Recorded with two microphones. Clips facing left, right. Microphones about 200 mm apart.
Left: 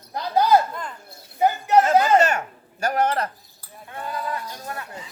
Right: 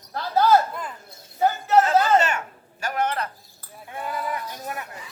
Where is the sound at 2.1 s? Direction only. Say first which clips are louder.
Left 3 dB; 40° left (ahead or behind).